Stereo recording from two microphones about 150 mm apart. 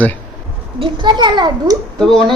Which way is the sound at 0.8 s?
30° right (ahead or behind).